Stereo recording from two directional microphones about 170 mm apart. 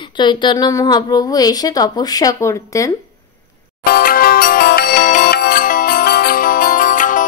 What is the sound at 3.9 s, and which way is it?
Music, 60° left (ahead or behind).